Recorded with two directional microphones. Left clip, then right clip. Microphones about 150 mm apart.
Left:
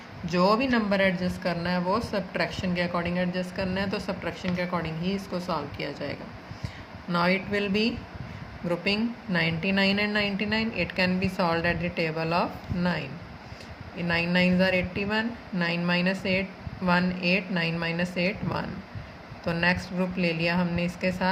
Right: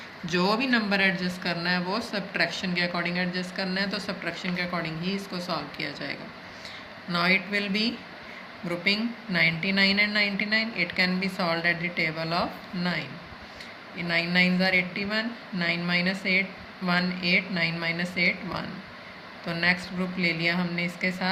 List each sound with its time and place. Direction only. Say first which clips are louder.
0.3 s a woman's voice: left 2 dB; 55° left (ahead or behind)
14.1 s a woman's voice: right 1 dB; 60° left (ahead or behind)